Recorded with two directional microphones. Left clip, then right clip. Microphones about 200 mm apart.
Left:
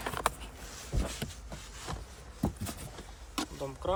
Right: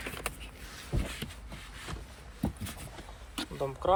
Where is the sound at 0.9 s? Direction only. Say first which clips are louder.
Even; 20° left (ahead or behind).